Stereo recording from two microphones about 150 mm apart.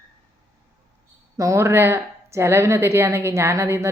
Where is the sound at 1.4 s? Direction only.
20° right (ahead or behind).